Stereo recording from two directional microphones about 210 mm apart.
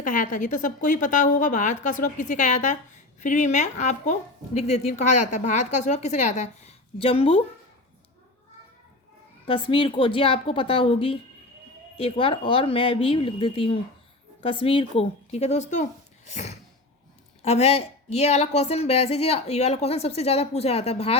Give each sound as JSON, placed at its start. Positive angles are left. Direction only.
{"t": 0.0, "sound": "speech", "side_deg": 40}
{"t": 9.5, "sound": "a woman's voice", "side_deg": 25}